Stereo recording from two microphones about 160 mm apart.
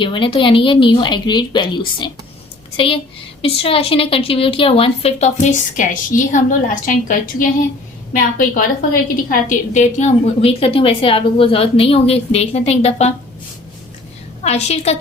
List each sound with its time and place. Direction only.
0.0 s a woman's voice: 30° left (ahead or behind); by 7.4 s 55° left (ahead or behind)
8.5 s a woman's voice: 60° left (ahead or behind); by 13.1 s 40° left (ahead or behind)
14.4 s a woman's voice: 40° left (ahead or behind)